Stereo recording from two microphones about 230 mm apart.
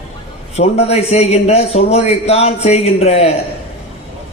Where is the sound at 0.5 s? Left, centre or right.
Left.